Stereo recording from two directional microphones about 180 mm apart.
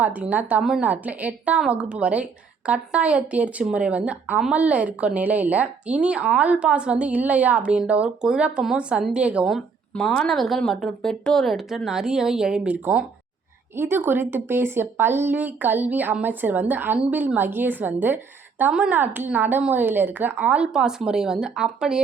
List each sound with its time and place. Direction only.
0.0 s a woman's voice: 10° right (ahead or behind)